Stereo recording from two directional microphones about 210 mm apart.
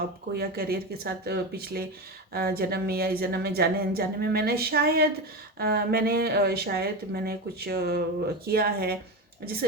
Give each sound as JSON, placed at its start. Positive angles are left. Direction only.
{"t": 0.3, "sound": "speech", "side_deg": -45}